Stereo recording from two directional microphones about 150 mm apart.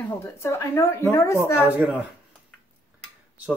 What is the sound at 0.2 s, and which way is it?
A woman's voice, 20° left (ahead or behind).